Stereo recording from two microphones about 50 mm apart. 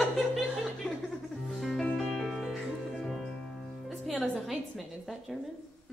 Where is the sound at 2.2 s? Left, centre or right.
Centre.